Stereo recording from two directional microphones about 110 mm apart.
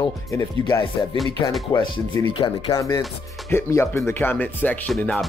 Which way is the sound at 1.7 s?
45° left (ahead or behind).